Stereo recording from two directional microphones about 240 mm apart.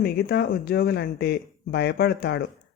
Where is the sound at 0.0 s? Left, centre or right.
Left.